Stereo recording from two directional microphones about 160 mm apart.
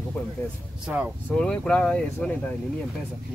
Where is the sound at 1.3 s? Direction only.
5° left (ahead or behind).